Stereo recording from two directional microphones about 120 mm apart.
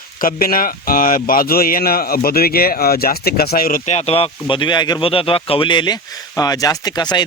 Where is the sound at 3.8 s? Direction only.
60° left (ahead or behind); by 5.0 s 35° left (ahead or behind).